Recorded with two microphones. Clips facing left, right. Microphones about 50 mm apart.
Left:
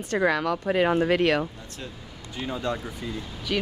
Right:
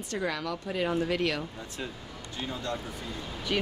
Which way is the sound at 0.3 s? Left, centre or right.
Left.